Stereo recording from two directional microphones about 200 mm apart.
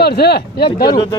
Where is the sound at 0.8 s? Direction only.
20° left (ahead or behind).